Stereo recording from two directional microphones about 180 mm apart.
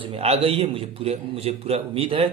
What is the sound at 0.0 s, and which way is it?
A man's voice, 30° right (ahead or behind).